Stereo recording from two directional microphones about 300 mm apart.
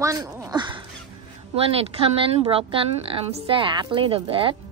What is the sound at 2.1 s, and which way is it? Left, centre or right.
A woman's voice, centre.